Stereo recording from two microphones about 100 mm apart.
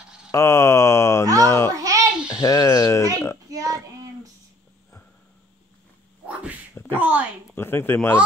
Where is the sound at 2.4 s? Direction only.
35° left (ahead or behind).